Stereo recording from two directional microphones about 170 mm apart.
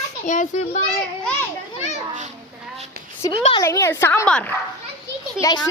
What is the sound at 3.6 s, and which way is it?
Speech, 15° left (ahead or behind).